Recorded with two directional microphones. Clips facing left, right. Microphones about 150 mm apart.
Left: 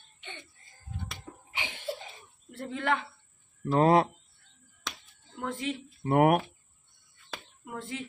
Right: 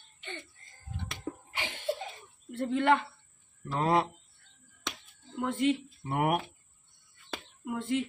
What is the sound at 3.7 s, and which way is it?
Speech, 40° left (ahead or behind).